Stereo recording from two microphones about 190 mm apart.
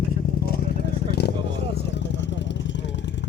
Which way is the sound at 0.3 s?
55° left (ahead or behind).